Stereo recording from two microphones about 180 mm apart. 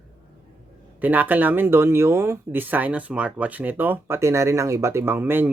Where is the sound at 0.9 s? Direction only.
10° right (ahead or behind).